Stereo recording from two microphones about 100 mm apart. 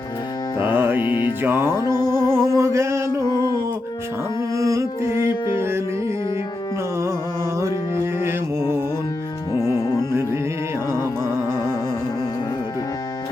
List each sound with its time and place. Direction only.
0.6 s music: 20° right (ahead or behind)
1.0 s music: 50° left (ahead or behind)
1.4 s music: 25° right (ahead or behind)
4.5 s music: 35° right (ahead or behind)
8.2 s music: 25° right (ahead or behind)
9.6 s music: 30° right (ahead or behind)